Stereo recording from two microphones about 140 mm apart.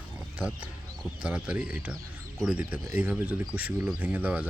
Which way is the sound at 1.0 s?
5° right (ahead or behind).